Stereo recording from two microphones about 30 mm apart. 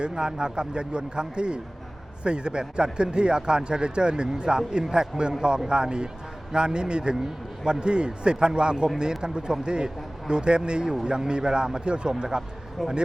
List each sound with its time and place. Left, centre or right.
0.1 s a man's voice: right
12.8 s speech: centre